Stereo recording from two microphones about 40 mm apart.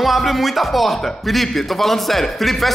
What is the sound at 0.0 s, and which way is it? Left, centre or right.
Speech, centre.